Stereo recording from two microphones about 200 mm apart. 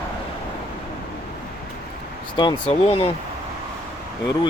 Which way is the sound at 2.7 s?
30° left (ahead or behind).